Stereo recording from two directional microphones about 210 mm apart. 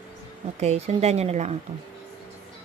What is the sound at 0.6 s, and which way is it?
Speech, 30° right (ahead or behind).